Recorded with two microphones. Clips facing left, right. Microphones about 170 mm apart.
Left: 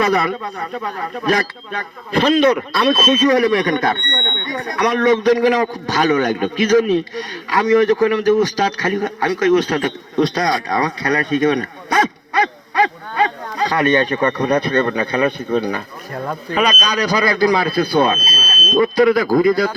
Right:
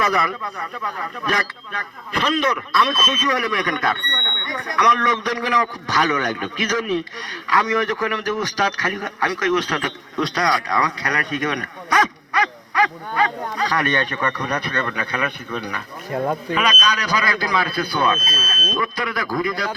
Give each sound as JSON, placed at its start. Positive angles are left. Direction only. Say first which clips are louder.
{"t": 0.0, "sound": "a man's voice", "louder": "left 4 dB", "side_deg": 30}
{"t": 16.1, "sound": "speech", "louder": "right 3 dB", "side_deg": -10}
{"t": 16.6, "sound": "speech", "louder": "left 9 dB", "side_deg": 35}